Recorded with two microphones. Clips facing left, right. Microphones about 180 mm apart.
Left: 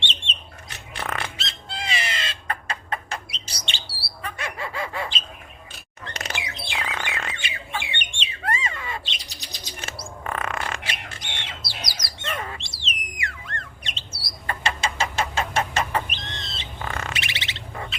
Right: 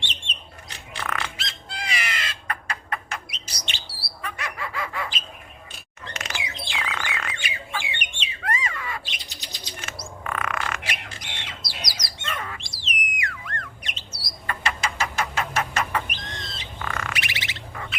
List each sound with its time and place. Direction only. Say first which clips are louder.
0.0 s bird: left 3 dB; 25° left (ahead or behind)
6.7 s bird: left 1 dB; 30° left (ahead or behind)